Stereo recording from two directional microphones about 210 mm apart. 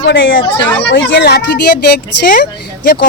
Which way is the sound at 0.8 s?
55° left (ahead or behind).